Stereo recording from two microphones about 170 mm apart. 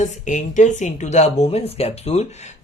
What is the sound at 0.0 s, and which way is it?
Speech, 45° left (ahead or behind).